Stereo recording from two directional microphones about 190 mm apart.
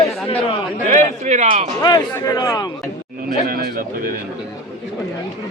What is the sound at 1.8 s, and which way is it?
Speech, 20° left (ahead or behind).